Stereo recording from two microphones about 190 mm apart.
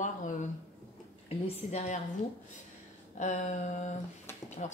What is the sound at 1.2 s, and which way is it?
Speech, 30° left (ahead or behind).